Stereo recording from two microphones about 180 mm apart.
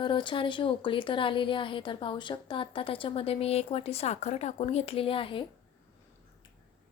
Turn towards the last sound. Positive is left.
turn(degrees=30)  # may be behind; listen again after turning